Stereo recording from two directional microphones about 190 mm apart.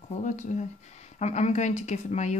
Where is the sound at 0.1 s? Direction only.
40° left (ahead or behind).